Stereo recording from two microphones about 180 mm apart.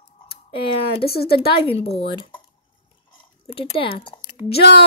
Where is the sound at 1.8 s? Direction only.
35° left (ahead or behind).